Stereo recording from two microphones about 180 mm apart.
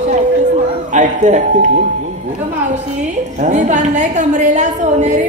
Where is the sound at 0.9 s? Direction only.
40° right (ahead or behind).